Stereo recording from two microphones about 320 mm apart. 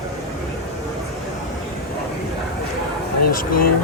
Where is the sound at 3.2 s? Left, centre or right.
Left.